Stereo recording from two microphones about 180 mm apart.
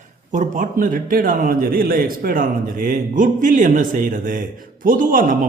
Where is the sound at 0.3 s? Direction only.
45° right (ahead or behind).